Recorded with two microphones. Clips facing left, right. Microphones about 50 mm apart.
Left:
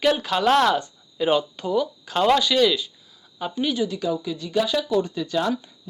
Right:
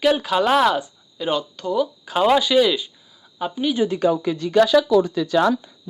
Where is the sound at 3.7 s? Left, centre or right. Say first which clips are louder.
Right 5 dB; right.